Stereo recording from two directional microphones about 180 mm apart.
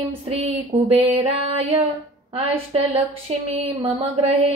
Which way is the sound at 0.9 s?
35° right (ahead or behind).